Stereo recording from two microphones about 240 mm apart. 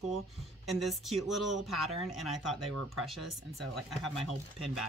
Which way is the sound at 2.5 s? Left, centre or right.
Right.